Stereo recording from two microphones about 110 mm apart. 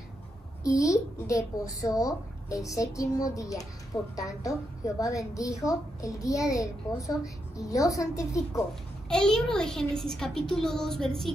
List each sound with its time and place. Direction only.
0.7 s a child's voice: 30° left (ahead or behind)
9.1 s a child's voice: 5° left (ahead or behind)